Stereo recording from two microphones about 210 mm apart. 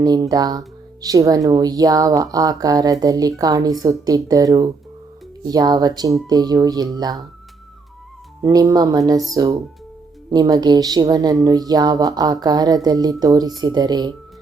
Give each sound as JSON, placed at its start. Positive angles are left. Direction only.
{"t": 0.0, "sound": "speech", "side_deg": -20}
{"t": 8.4, "sound": "speech", "side_deg": -15}